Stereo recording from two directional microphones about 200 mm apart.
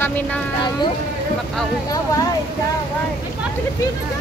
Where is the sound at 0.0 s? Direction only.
10° left (ahead or behind).